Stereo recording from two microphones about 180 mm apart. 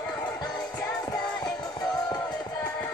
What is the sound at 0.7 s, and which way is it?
Music, 5° left (ahead or behind).